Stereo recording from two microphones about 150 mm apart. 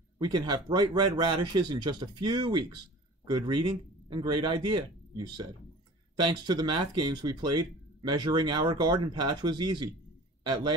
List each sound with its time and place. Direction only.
0.2 s a man's voice: 30° right (ahead or behind)